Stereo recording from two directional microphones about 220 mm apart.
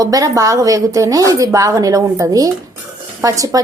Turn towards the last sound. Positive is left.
turn(degrees=-15)  # may be behind; listen again after turning